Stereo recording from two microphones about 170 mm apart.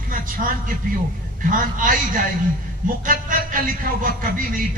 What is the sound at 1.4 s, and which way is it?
Speech, 50° right (ahead or behind).